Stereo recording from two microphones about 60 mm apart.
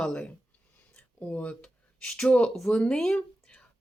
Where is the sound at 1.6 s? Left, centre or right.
Centre.